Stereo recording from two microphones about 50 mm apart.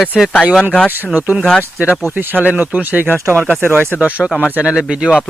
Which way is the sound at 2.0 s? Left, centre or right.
Right.